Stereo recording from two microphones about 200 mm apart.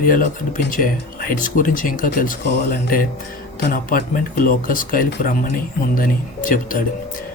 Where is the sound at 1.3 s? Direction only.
40° left (ahead or behind).